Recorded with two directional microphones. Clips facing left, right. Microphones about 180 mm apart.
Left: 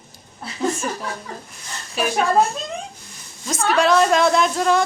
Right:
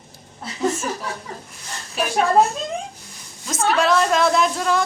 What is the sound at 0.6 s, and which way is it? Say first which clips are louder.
A woman's voice: even; 5° right (ahead or behind).